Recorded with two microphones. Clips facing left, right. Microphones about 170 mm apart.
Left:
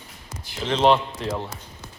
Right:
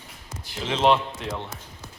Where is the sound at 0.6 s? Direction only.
Centre (ahead or behind).